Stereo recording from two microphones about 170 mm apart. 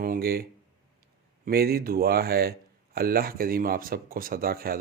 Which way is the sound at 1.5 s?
65° right (ahead or behind).